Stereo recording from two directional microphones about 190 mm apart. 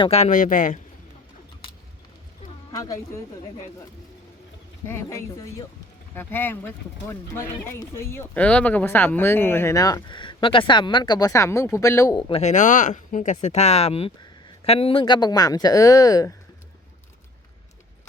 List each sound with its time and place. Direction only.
0.0 s speech: 35° left (ahead or behind)
2.7 s speech: 20° left (ahead or behind)
4.9 s speech: 15° left (ahead or behind)
12.3 s speech: 35° left (ahead or behind); by 16.3 s 20° left (ahead or behind)